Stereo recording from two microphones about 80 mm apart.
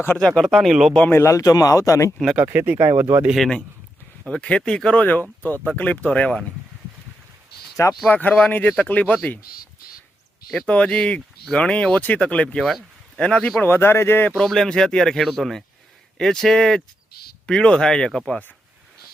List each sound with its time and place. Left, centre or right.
0.2 s speech: centre
0.5 s speech: centre
1.1 s speech: left
2.3 s speech: right
2.7 s speech: right
3.3 s speech: centre
4.3 s speech: centre
7.8 s speech: left
8.1 s speech: left
10.7 s speech: centre
13.6 s speech: left
14.3 s speech: centre